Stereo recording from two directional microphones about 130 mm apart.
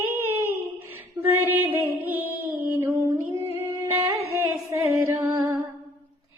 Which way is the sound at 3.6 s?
15° right (ahead or behind).